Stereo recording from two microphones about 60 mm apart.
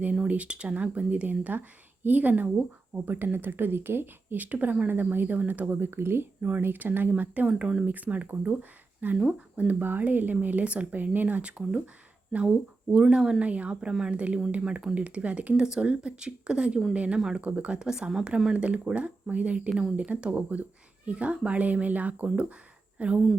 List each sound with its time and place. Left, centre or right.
0.3 s speech: right
6.4 s speech: right
7.4 s speech: centre
7.9 s speech: right
9.1 s speech: centre
9.8 s speech: right; by 13.3 s centre
13.4 s speech: right
17.4 s speech: right
18.5 s speech: centre